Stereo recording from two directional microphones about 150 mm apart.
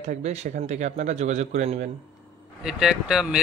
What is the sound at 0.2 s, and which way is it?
A man's voice, 50° right (ahead or behind).